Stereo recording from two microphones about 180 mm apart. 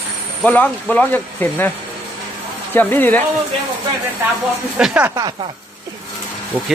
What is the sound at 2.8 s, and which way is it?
Speech, 10° left (ahead or behind).